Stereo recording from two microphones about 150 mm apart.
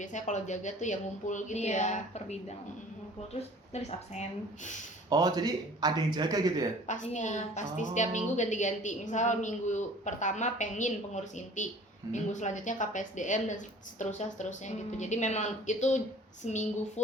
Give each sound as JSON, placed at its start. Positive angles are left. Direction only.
{"t": 0.0, "sound": "a woman's voice", "side_deg": 55}
{"t": 5.0, "sound": "speech", "side_deg": -25}
{"t": 6.8, "sound": "a woman's voice", "side_deg": 55}